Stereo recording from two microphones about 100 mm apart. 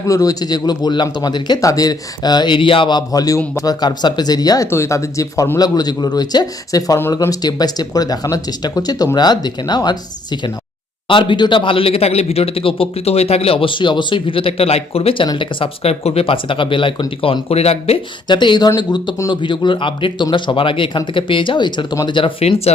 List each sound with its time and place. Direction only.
0.1 s speech: 35° left (ahead or behind)
11.1 s a man's voice: 55° left (ahead or behind); by 15.3 s 80° left
15.4 s a man's voice: 65° left (ahead or behind)
17.5 s speech: 90° left
18.3 s a man's voice: 50° left (ahead or behind); by 22.7 s 90° left